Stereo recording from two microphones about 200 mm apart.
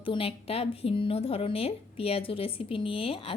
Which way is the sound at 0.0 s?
25° left (ahead or behind).